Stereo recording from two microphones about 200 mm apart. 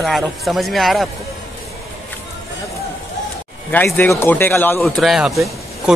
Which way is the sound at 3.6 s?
10° left (ahead or behind).